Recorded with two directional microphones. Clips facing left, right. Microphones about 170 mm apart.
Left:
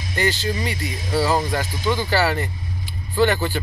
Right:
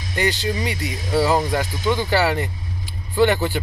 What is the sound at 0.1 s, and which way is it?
Speech, 15° right (ahead or behind).